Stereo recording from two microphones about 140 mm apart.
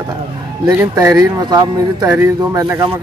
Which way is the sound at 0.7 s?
20° right (ahead or behind).